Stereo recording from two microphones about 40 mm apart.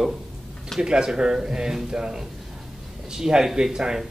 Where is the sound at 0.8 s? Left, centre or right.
Centre.